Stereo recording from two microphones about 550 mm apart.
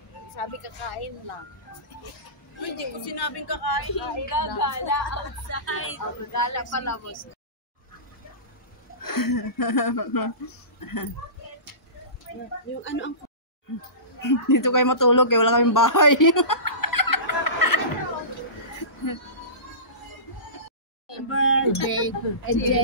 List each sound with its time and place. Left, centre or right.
0.6 s speech: left
2.8 s a woman's voice: left
9.0 s a woman's voice: left
12.3 s speech: left
12.8 s speech: centre
14.2 s speech: left
21.3 s a sound: left